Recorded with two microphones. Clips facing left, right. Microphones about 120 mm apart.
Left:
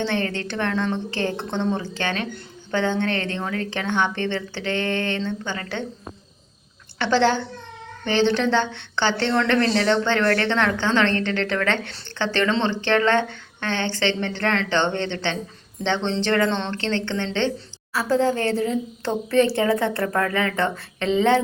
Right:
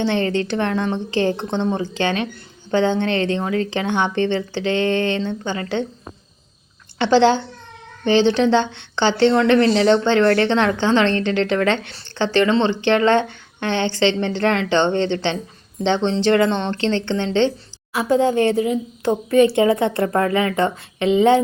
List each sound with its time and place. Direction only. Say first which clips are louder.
0.0 s a woman's voice: right 5 dB; 20° right (ahead or behind)
7.0 s a woman's voice: right 5 dB; 20° right (ahead or behind)